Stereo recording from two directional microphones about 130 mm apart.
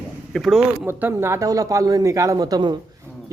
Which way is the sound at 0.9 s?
15° right (ahead or behind).